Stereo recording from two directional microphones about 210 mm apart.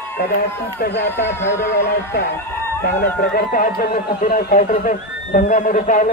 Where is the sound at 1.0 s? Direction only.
10° left (ahead or behind).